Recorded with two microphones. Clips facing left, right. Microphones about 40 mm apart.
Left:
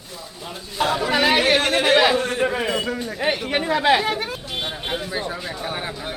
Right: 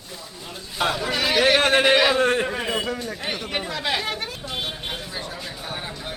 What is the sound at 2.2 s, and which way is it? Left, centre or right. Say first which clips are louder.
Speech: right 4 dB; right.